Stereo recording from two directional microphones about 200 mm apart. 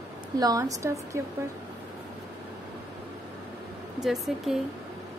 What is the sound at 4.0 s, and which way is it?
Speech, centre (ahead or behind).